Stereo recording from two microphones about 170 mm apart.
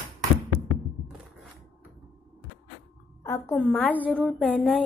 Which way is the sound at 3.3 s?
15° left (ahead or behind).